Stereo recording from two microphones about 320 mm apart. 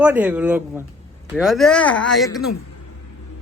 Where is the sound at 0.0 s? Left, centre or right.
Centre.